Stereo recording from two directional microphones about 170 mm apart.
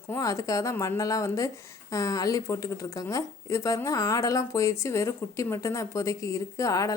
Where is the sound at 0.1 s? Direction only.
20° left (ahead or behind).